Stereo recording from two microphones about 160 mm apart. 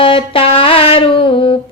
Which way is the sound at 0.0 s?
35° left (ahead or behind).